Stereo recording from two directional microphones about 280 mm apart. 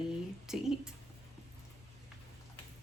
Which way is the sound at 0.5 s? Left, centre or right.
Centre.